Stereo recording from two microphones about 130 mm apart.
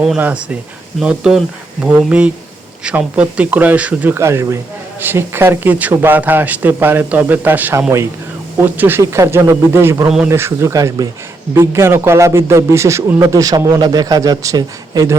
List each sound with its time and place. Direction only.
0.2 s a man's voice: 10° right (ahead or behind); by 15.1 s 25° right (ahead or behind)